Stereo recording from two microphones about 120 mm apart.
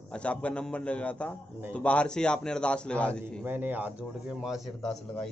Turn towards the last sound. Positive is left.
turn(degrees=5)  # may be behind; listen again after turning